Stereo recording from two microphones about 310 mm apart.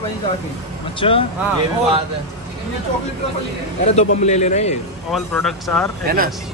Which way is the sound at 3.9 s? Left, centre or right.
Left.